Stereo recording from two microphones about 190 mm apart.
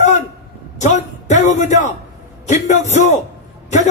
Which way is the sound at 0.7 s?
40° left (ahead or behind).